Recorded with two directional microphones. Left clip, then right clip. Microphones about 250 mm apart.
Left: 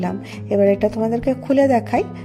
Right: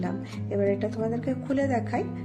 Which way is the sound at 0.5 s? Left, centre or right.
Left.